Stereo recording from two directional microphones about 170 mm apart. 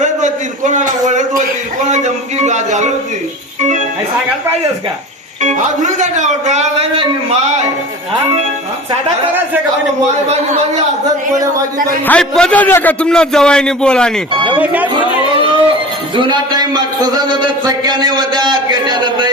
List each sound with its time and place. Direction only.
0.0 s a sound: 45° right (ahead or behind)
1.9 s speech: 45° right (ahead or behind)
3.6 s music: 45° right (ahead or behind)
5.4 s speech: 45° right (ahead or behind)
12.0 s a man's voice: 5° left (ahead or behind)
14.3 s a man's voice: 30° right (ahead or behind)
14.6 s speech: 10° right (ahead or behind)
15.4 s music: 30° right (ahead or behind)
16.1 s a man's voice: 30° right (ahead or behind)
18.3 s a sound: 25° right (ahead or behind)